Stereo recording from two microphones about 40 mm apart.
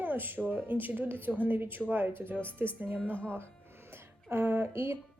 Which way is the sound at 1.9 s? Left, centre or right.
Right.